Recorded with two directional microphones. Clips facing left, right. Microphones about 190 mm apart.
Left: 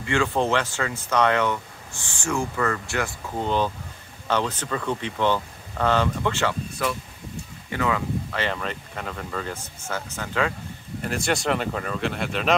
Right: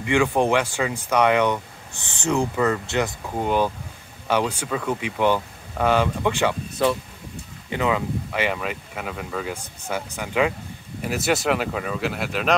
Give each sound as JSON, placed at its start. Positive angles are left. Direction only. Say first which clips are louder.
{"t": 0.0, "sound": "speech", "louder": "right 3 dB", "side_deg": -15}
{"t": 6.8, "sound": "speech", "louder": "right 7 dB", "side_deg": -25}